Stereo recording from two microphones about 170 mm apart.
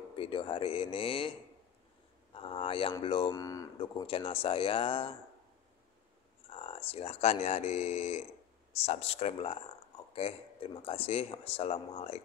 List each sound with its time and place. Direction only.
0.1 s speech: 30° left (ahead or behind)
2.3 s a man's voice: 30° left (ahead or behind)
4.1 s a man's voice: 30° left (ahead or behind)
6.5 s a man's voice: 35° left (ahead or behind)